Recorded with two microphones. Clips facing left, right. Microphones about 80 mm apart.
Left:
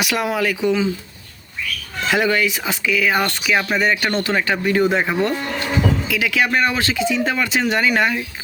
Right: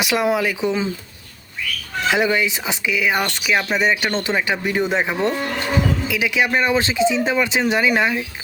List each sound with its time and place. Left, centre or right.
0.0 s speech: right
2.0 s speech: centre